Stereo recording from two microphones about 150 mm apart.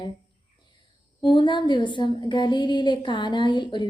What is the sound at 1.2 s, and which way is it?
A woman's voice, 30° left (ahead or behind).